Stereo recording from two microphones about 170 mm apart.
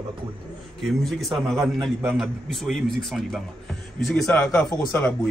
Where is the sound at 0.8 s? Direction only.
Centre (ahead or behind).